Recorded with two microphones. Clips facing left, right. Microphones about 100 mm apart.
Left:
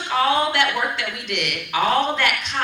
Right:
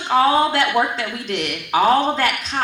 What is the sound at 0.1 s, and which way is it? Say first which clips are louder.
A woman's voice: right 4 dB; 35° right (ahead or behind).